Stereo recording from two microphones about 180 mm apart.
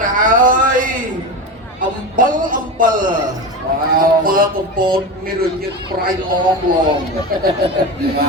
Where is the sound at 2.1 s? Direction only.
50° right (ahead or behind).